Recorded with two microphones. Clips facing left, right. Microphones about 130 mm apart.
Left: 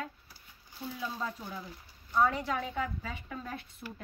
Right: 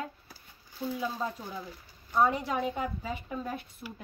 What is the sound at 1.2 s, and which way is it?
A woman's voice, 20° right (ahead or behind).